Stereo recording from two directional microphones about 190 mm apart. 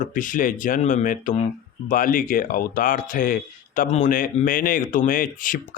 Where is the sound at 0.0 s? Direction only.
45° left (ahead or behind).